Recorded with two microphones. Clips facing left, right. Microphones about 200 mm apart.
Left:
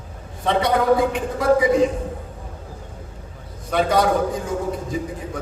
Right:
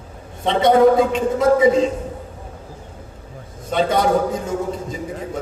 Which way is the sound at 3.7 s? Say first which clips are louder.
Even; 25° right (ahead or behind).